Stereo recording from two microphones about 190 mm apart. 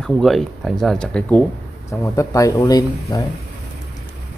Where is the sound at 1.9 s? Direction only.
15° left (ahead or behind).